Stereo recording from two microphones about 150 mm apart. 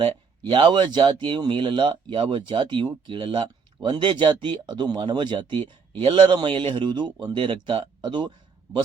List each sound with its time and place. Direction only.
0.5 s speech: 35° right (ahead or behind)